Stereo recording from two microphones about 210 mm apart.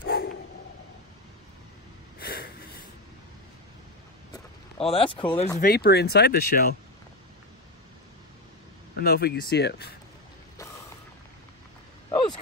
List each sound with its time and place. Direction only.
0.0 s dog: 50° left (ahead or behind)
2.1 s wheeze: 45° left (ahead or behind)
4.3 s a sound: 25° left (ahead or behind)
5.6 s speech: 45° left (ahead or behind)
8.9 s speech: 50° left (ahead or behind)
12.1 s vehicle: 20° left (ahead or behind)